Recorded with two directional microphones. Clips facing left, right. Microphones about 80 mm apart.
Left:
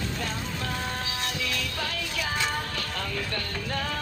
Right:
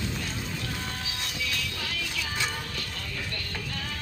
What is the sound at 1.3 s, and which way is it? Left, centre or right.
Music, left.